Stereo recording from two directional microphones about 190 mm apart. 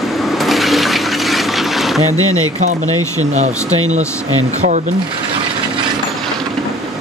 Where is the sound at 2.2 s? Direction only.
90° right.